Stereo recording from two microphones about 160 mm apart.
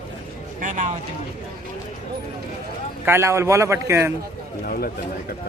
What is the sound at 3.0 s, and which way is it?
A man's voice, 15° right (ahead or behind).